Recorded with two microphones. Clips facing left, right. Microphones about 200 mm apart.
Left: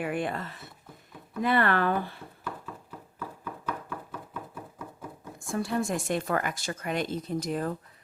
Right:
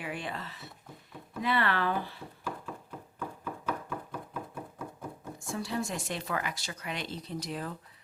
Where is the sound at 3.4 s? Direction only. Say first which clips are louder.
Even; 10° right (ahead or behind).